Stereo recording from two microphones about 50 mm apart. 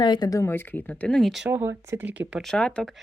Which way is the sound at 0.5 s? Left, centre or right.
Left.